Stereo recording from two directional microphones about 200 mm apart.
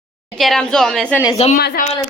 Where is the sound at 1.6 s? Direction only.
50° left (ahead or behind).